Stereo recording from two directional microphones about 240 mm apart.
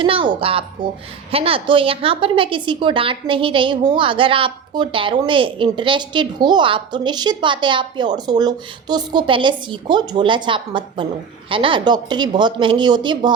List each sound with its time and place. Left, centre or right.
0.0 s a woman's voice: right